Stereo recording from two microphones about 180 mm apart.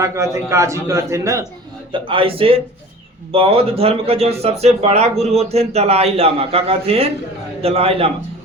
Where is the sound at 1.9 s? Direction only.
30° right (ahead or behind).